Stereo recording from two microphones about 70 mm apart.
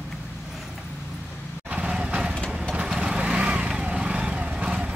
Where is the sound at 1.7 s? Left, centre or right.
Centre.